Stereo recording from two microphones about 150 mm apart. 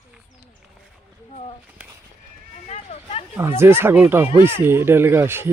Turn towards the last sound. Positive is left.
turn(degrees=-15)  # may be behind; listen again after turning